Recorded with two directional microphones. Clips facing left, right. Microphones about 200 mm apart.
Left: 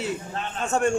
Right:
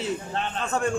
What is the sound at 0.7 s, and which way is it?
Speech, 25° left (ahead or behind).